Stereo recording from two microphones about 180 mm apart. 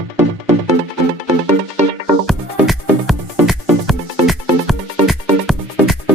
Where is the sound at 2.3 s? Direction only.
Centre (ahead or behind).